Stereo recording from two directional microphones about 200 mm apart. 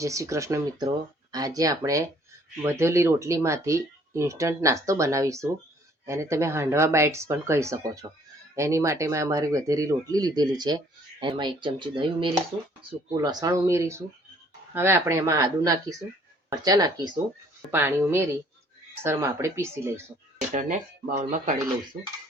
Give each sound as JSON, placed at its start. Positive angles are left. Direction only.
{"t": 0.0, "sound": "speech", "side_deg": -15}
{"t": 20.5, "sound": "speech", "side_deg": -40}